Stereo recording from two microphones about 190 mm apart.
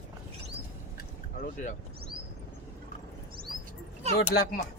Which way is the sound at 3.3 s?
50° right (ahead or behind).